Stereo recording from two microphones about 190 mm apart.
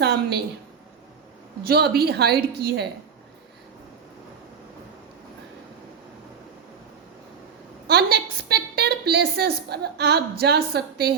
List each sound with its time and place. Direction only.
0.0 s a sound: 60° right (ahead or behind)
1.6 s a woman's voice: 55° right (ahead or behind)
7.9 s a woman's voice: 60° right (ahead or behind)